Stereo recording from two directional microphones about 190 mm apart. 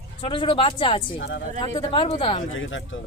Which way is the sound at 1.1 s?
85° left.